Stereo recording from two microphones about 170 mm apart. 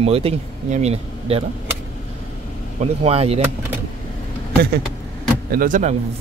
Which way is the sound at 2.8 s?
35° right (ahead or behind).